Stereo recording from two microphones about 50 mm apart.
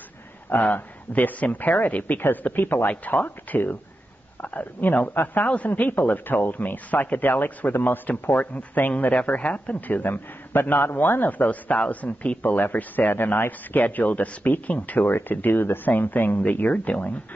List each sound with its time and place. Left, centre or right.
0.5 s a man's voice: left
2.5 s speech: left
2.9 s speech: left
3.3 s a man's voice: left
8.4 s a man's voice: left